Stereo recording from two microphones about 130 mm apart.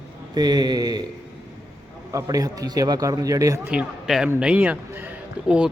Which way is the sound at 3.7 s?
5° right (ahead or behind).